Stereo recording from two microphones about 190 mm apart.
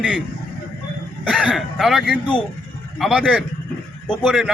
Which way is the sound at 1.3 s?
5° right (ahead or behind).